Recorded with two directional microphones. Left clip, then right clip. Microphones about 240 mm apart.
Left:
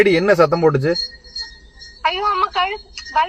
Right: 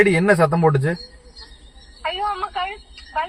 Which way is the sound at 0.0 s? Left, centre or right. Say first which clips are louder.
Left 3 dB; left.